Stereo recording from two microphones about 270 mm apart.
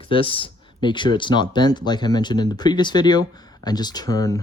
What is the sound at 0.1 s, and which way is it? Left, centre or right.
Speech, centre.